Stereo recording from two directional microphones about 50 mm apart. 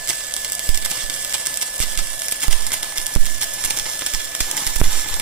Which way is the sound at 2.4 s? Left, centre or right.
Right.